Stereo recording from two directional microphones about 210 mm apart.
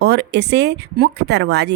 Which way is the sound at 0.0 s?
50° right (ahead or behind).